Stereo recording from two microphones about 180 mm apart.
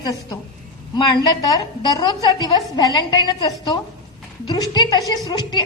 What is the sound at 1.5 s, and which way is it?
A woman's voice, 25° left (ahead or behind).